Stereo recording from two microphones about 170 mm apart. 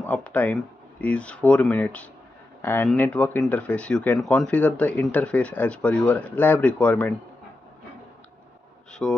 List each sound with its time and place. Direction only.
0.0 s speech: 10° left (ahead or behind)
9.0 s speech: 5° left (ahead or behind)